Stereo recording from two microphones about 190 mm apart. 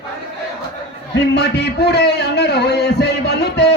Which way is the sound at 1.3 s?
60° left (ahead or behind).